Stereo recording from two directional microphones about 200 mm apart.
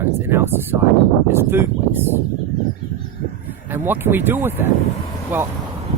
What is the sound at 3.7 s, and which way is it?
Speech, 10° right (ahead or behind).